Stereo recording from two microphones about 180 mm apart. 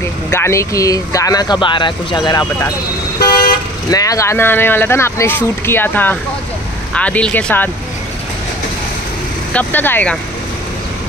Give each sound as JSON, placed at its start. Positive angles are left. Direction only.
{"t": 0.3, "sound": "speech", "side_deg": 15}
{"t": 3.2, "sound": "toot", "side_deg": 55}
{"t": 3.9, "sound": "speech", "side_deg": 20}
{"t": 9.5, "sound": "speech", "side_deg": 10}